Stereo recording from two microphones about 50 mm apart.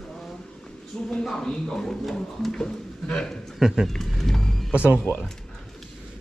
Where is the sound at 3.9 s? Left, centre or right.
Centre.